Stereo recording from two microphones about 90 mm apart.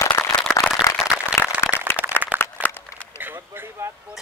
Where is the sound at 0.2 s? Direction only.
10° left (ahead or behind).